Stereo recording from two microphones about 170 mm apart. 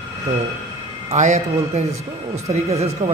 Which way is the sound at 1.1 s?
45° right (ahead or behind).